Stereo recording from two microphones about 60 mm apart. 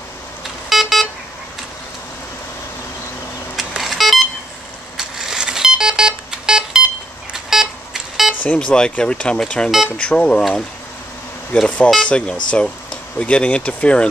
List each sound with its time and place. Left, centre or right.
0.7 s vehicle: centre
3.5 s vehicle: centre
4.9 s a sound: centre
8.5 s speech: centre
11.5 s speech: left